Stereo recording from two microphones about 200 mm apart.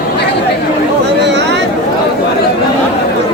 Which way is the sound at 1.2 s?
60° right (ahead or behind).